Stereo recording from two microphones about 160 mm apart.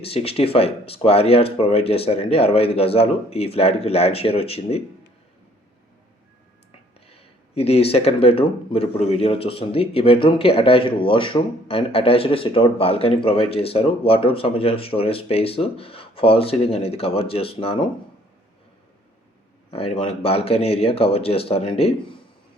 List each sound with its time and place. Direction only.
0.0 s speech: 35° left (ahead or behind)
6.7 s speech: 40° left (ahead or behind)
19.7 s speech: 40° left (ahead or behind)